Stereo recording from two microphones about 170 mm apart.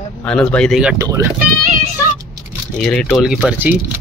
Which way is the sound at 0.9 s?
15° right (ahead or behind).